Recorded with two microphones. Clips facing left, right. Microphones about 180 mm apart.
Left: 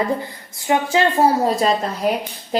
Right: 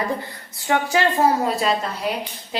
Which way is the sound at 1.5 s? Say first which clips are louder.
Left 3 dB; 40° left (ahead or behind).